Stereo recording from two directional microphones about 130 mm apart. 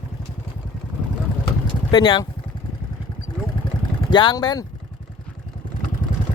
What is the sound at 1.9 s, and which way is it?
Speech, 35° left (ahead or behind).